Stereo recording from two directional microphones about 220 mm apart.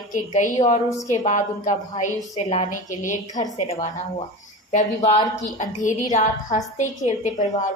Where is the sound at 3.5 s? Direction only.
30° left (ahead or behind).